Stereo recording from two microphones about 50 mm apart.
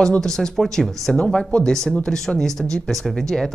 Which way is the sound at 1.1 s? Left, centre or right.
Left.